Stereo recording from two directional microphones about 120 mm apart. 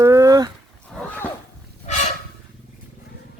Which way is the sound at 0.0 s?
25° right (ahead or behind).